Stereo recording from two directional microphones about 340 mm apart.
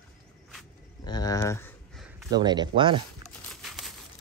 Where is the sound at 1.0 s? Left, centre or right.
Centre.